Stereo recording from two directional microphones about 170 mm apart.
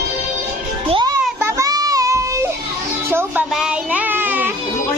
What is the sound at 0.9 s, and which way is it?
Children playing, 25° right (ahead or behind).